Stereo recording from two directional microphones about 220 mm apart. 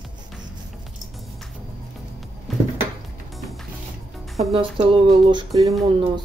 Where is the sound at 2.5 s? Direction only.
Centre (ahead or behind).